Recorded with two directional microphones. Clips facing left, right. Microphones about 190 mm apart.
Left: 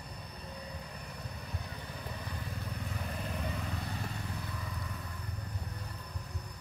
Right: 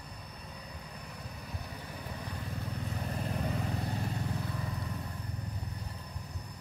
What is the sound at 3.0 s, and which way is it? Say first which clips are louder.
Vehicle: right 4 dB; 25° right (ahead or behind).